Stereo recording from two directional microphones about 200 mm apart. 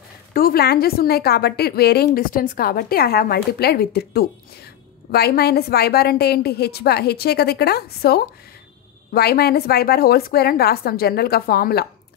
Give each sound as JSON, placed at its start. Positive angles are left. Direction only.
{"t": 0.3, "sound": "a woman's voice", "side_deg": 50}